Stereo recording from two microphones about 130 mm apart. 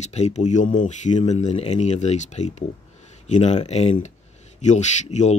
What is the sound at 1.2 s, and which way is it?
Speech, 55° left (ahead or behind).